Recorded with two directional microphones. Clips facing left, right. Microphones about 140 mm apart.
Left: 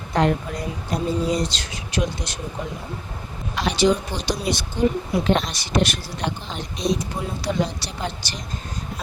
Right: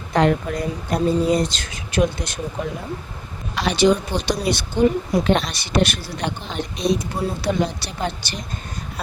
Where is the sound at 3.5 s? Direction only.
70° right (ahead or behind).